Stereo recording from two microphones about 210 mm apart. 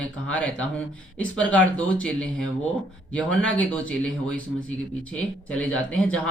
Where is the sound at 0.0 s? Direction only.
5° left (ahead or behind).